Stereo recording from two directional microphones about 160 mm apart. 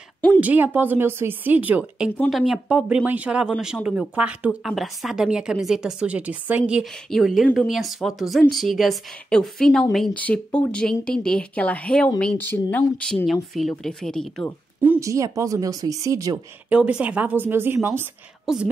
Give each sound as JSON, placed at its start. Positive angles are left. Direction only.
{"t": 0.4, "sound": "a woman's voice", "side_deg": -10}
{"t": 14.8, "sound": "speech", "side_deg": -15}
{"t": 16.6, "sound": "speech", "side_deg": -10}
{"t": 18.4, "sound": "a woman's voice", "side_deg": -5}